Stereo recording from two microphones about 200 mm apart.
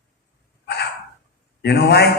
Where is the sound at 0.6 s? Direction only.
55° left (ahead or behind).